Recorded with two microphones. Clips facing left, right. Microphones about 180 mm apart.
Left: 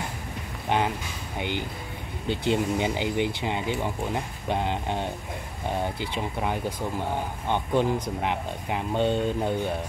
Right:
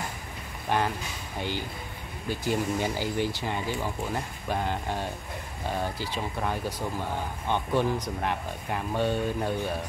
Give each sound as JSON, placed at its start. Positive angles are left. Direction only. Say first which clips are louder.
{"t": 0.7, "sound": "vehicle", "louder": "left 2 dB", "side_deg": 15}
{"t": 2.2, "sound": "speech", "louder": "left 3 dB", "side_deg": 25}